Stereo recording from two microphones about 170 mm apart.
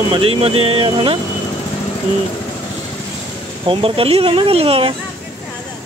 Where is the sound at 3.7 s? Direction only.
30° right (ahead or behind).